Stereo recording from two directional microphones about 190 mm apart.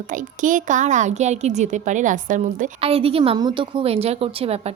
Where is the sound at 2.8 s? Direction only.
30° right (ahead or behind).